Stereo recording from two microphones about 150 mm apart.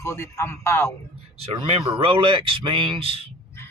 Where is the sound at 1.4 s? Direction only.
40° right (ahead or behind).